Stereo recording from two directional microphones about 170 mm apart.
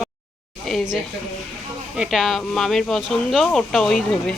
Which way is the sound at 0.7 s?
Centre (ahead or behind).